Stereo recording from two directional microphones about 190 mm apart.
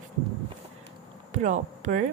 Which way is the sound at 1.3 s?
40° right (ahead or behind).